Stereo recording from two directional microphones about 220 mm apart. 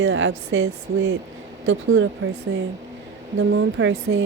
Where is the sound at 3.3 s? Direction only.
60° right (ahead or behind).